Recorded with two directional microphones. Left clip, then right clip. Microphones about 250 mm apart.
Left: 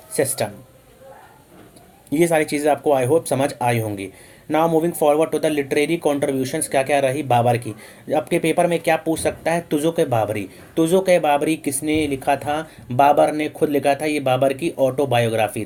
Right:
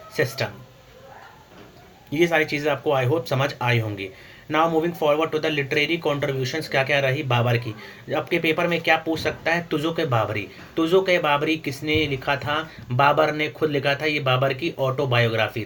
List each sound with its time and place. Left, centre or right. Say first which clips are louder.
0.1 s speech: left 3 dB; left
2.0 s speech: left 2 dB; left